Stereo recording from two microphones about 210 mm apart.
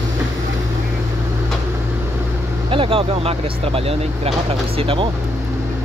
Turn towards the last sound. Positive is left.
turn(degrees=-25)  # may be behind; listen again after turning